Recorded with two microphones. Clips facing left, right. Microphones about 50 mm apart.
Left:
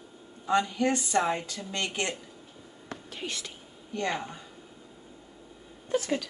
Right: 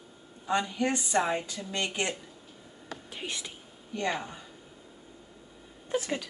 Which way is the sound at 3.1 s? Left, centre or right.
Centre.